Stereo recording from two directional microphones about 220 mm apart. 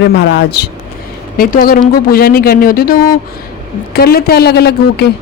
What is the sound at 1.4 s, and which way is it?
Speech, 40° left (ahead or behind).